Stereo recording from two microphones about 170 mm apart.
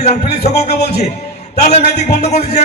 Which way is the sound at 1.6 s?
40° left (ahead or behind).